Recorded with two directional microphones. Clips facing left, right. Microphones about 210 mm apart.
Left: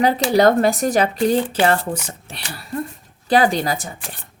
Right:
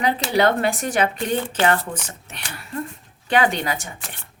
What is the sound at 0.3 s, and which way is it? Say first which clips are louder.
Speech: left 5 dB; 40° left (ahead or behind).